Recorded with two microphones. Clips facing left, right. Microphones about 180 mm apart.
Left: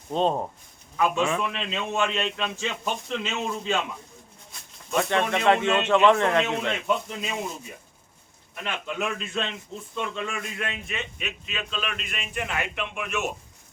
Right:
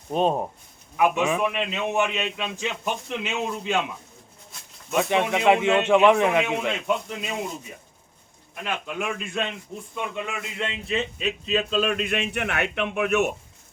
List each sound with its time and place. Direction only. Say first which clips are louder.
0.1 s a man's voice: right 2 dB; 15° right (ahead or behind)
4.9 s a man's voice: right 2 dB; 10° right (ahead or behind)
8.6 s a man's voice: right 1 dB; 10° right (ahead or behind); by 12.0 s 40° right (ahead or behind)
12.0 s a man's voice: right 6 dB; 65° right (ahead or behind)